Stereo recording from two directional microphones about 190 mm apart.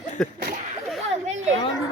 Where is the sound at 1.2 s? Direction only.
35° right (ahead or behind).